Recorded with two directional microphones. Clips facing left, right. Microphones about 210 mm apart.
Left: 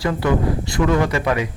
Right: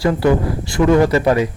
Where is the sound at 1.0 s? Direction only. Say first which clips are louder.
Right 6 dB; 35° right (ahead or behind).